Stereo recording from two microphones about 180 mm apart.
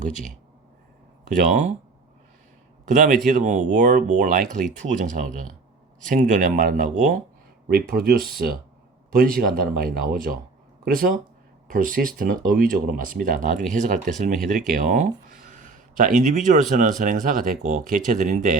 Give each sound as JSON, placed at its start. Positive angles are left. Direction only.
{"t": 1.4, "sound": "speech", "side_deg": -45}
{"t": 2.8, "sound": "speech", "side_deg": -45}